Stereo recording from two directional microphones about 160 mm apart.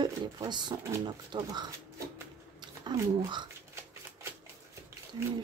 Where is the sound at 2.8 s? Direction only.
25° right (ahead or behind).